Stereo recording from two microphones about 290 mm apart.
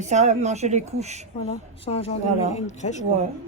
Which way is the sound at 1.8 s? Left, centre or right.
Left.